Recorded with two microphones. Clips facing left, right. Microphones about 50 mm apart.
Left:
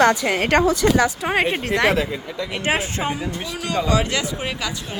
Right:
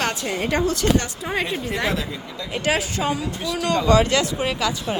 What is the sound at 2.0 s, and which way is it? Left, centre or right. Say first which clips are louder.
Speech: left 6 dB; left.